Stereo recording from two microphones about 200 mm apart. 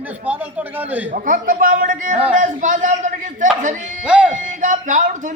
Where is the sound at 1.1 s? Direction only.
40° right (ahead or behind).